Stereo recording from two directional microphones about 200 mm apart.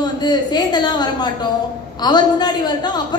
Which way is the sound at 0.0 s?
20° left (ahead or behind).